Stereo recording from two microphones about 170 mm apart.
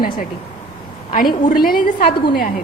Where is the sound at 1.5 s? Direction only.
60° left (ahead or behind).